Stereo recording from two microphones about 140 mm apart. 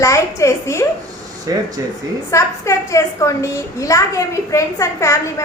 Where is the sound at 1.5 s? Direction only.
25° right (ahead or behind).